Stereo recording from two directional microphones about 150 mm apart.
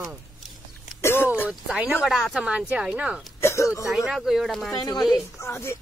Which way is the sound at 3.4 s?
20° left (ahead or behind).